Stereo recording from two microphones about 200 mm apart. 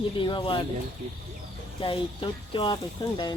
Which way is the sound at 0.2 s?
25° left (ahead or behind).